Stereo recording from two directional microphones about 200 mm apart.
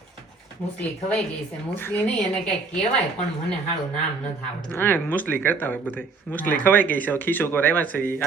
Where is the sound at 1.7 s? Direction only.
10° left (ahead or behind).